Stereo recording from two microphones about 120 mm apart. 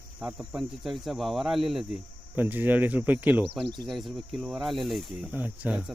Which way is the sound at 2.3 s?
15° right (ahead or behind).